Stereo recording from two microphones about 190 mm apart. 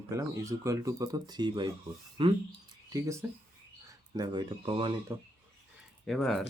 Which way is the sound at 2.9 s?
15° right (ahead or behind).